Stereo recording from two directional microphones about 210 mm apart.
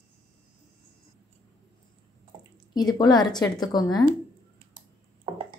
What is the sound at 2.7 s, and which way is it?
A woman's voice, 20° left (ahead or behind).